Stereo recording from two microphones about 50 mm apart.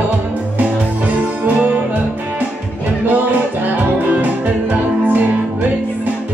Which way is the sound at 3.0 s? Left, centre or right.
Right.